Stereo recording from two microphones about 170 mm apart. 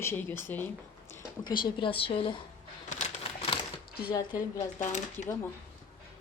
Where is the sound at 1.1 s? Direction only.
25° left (ahead or behind).